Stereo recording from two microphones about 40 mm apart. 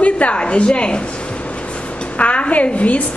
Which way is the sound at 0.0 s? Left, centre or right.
Left.